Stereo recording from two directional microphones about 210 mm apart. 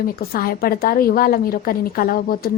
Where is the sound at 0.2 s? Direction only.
45° left (ahead or behind).